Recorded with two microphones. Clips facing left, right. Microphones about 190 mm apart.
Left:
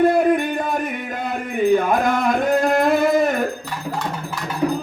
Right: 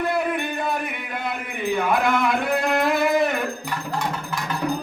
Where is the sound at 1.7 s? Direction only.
40° left (ahead or behind).